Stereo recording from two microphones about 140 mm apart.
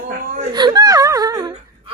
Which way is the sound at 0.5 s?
30° right (ahead or behind).